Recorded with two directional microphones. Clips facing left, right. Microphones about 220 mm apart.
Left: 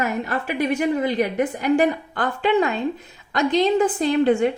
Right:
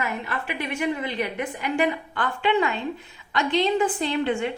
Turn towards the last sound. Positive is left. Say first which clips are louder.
# left 7 dB
turn(degrees=40)  # may be behind; listen again after turning